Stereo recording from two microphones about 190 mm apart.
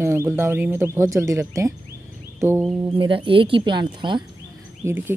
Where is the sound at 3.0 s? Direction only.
30° right (ahead or behind).